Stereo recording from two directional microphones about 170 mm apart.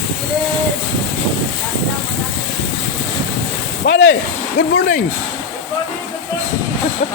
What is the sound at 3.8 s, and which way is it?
Speech, 90° left.